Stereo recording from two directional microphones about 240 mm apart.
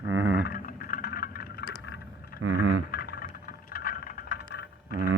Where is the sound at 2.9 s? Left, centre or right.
Left.